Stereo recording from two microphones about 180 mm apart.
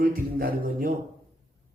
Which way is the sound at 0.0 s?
55° right (ahead or behind).